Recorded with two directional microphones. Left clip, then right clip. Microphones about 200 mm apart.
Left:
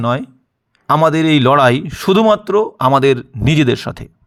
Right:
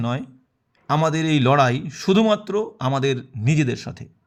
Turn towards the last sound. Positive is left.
turn(degrees=40)  # may be behind; listen again after turning